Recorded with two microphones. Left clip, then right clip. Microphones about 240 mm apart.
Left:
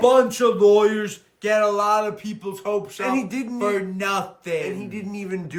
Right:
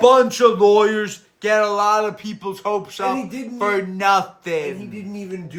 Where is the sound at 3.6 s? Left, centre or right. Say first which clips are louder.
Right 4 dB; centre.